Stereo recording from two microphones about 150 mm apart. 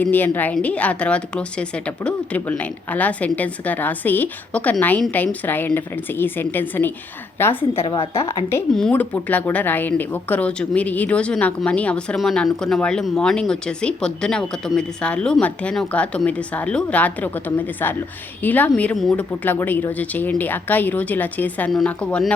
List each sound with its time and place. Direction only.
0.0 s speech: 10° left (ahead or behind)
18.4 s a woman's voice: 10° left (ahead or behind)